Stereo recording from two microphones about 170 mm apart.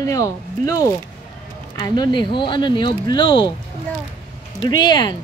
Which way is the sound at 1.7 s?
25° left (ahead or behind).